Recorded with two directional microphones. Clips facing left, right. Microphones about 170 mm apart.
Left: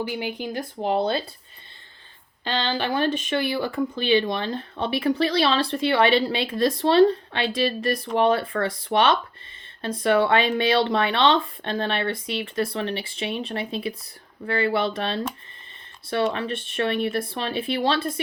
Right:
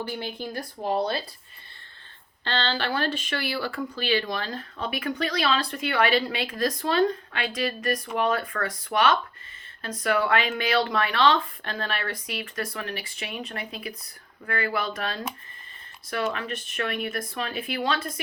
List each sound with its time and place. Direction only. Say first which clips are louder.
0.1 s speech: left 4 dB; 15° left (ahead or behind)
2.4 s speech: left 2 dB; 15° left (ahead or behind); by 18.1 s 30° left (ahead or behind)